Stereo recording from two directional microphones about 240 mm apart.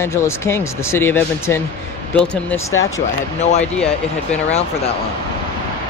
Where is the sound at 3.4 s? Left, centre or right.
Left.